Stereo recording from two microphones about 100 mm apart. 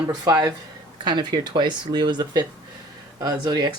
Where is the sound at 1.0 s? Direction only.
45° right (ahead or behind).